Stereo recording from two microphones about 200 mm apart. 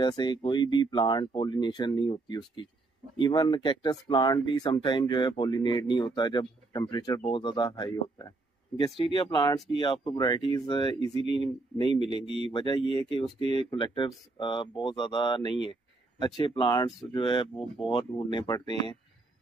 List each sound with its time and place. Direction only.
0.0 s speech: 20° left (ahead or behind)
13.4 s speech: 30° right (ahead or behind)
13.7 s speech: 25° left (ahead or behind)